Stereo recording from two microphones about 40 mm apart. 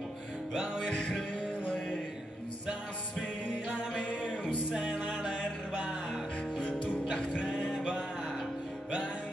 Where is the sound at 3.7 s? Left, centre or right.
Right.